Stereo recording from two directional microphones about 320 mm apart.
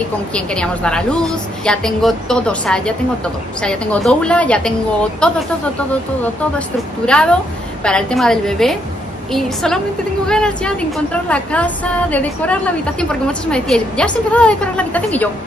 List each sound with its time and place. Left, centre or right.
0.3 s a woman's voice: centre
7.1 s a woman's voice: centre